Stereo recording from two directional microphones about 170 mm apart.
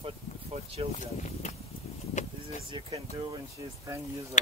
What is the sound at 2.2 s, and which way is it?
Vehicle, 45° left (ahead or behind).